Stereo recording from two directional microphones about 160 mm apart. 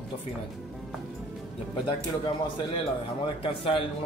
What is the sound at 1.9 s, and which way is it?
A woman's voice, 30° left (ahead or behind).